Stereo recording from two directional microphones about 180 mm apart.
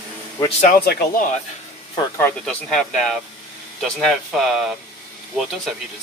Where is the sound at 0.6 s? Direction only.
55° left (ahead or behind).